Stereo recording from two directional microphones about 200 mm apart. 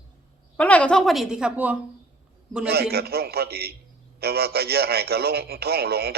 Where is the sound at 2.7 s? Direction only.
50° right (ahead or behind).